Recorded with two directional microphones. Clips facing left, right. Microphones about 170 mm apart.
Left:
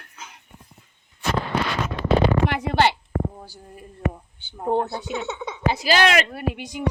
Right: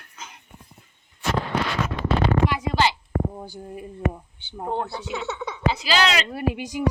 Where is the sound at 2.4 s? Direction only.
60° left (ahead or behind).